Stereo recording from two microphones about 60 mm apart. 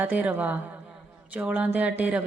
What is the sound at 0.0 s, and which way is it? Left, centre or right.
Speech, right.